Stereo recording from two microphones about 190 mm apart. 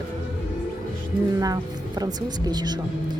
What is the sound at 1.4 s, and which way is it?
Speech, 20° right (ahead or behind).